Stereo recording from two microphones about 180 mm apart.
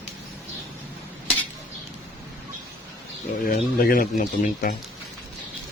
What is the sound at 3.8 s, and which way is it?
Speech, 55° left (ahead or behind).